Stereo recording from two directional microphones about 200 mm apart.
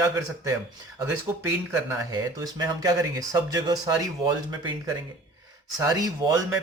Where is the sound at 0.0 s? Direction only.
15° right (ahead or behind).